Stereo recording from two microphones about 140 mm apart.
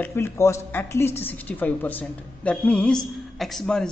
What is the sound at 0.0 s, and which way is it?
A woman's voice, 15° left (ahead or behind).